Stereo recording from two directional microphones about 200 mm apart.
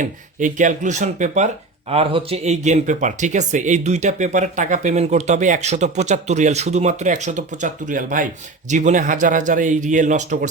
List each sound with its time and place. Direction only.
0.0 s speech: 40° right (ahead or behind)